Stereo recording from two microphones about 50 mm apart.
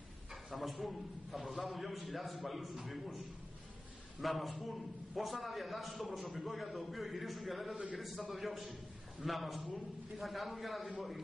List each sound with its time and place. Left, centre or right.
0.3 s a man's voice: centre
4.2 s a man's voice: centre